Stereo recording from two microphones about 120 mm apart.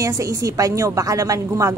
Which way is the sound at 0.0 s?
25° right (ahead or behind).